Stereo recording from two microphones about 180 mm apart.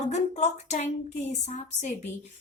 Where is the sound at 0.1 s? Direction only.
40° left (ahead or behind).